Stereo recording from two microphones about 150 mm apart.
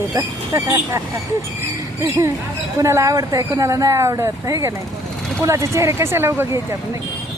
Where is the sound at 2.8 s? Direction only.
20° right (ahead or behind).